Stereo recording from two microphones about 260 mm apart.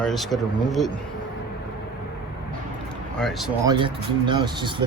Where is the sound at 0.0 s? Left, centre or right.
Centre.